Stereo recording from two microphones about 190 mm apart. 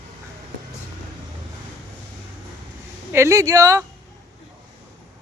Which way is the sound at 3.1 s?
15° right (ahead or behind).